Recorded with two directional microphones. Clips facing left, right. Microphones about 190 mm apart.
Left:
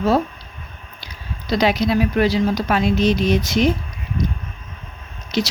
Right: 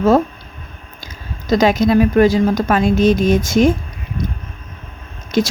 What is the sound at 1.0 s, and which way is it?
Speech, 45° right (ahead or behind).